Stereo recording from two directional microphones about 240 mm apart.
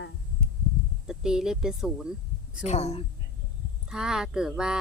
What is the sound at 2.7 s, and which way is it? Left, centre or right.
Speech, left.